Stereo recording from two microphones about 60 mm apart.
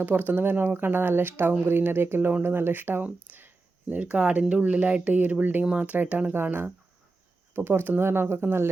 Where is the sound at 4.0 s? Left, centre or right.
Right.